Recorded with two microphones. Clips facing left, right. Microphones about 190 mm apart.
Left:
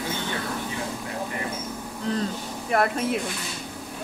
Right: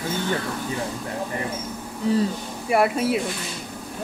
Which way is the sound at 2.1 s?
10° right (ahead or behind).